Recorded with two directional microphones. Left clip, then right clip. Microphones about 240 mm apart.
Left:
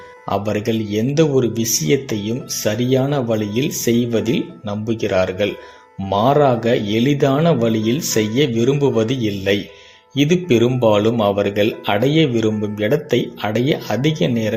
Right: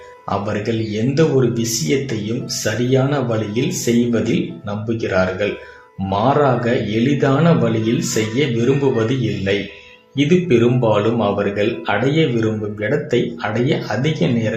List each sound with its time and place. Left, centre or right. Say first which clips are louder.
0.3 s speech: left 1 dB; left
2.6 s speech: even; left